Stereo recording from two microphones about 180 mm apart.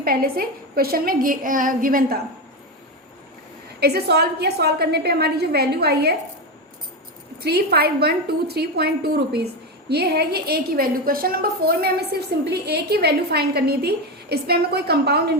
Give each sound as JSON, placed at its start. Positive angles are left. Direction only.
{"t": 0.0, "sound": "a woman's voice", "side_deg": -55}
{"t": 3.8, "sound": "a woman's voice", "side_deg": -65}
{"t": 7.4, "sound": "a woman's voice", "side_deg": -60}